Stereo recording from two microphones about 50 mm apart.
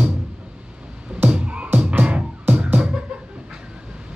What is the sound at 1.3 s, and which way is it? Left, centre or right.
Music, right.